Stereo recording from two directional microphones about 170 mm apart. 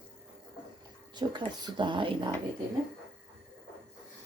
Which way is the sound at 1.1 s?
25° right (ahead or behind).